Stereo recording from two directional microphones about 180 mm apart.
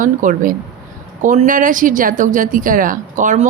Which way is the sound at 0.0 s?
45° right (ahead or behind).